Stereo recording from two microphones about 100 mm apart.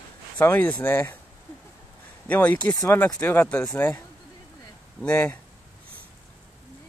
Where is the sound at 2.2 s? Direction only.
15° left (ahead or behind).